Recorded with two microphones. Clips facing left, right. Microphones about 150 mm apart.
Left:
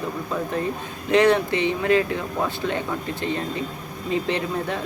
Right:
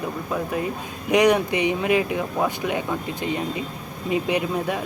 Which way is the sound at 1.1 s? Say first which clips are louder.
Even; 15° right (ahead or behind).